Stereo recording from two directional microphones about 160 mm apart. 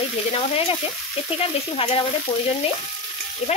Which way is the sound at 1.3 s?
35° left (ahead or behind).